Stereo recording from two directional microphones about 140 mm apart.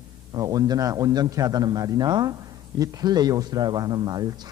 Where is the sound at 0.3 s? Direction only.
25° right (ahead or behind).